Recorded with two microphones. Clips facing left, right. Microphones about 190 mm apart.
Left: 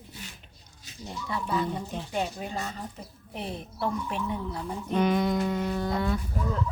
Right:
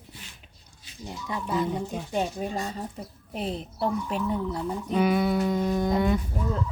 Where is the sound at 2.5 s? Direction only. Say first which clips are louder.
Right 3 dB; 30° right (ahead or behind).